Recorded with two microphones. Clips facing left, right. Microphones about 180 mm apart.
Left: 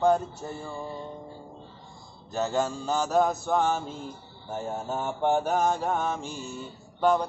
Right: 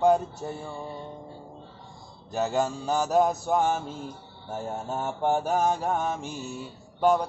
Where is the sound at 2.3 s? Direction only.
15° right (ahead or behind).